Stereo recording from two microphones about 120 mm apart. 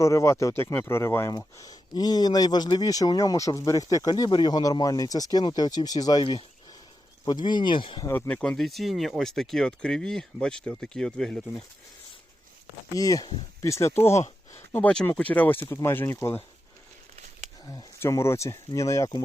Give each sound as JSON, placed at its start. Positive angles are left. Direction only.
{"t": 0.0, "sound": "speech", "side_deg": 25}
{"t": 1.3, "sound": "speech", "side_deg": 30}
{"t": 7.3, "sound": "speech", "side_deg": 40}
{"t": 8.0, "sound": "speech", "side_deg": 25}
{"t": 8.3, "sound": "speech", "side_deg": 10}
{"t": 12.9, "sound": "speech", "side_deg": 30}
{"t": 18.0, "sound": "speech", "side_deg": 20}